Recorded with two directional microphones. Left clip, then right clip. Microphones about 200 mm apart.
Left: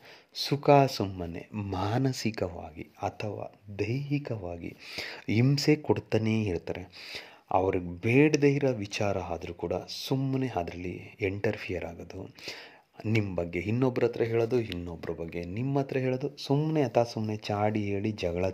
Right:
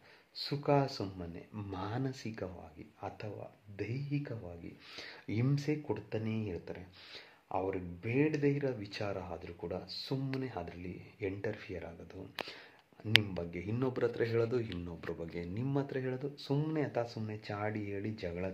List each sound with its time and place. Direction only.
0.4 s speech: 45° left (ahead or behind)
4.9 s speech: 40° left (ahead or behind)
13.0 s speech: 35° left (ahead or behind)
16.7 s speech: 40° left (ahead or behind)